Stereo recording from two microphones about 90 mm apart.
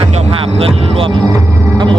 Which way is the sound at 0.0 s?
90° right.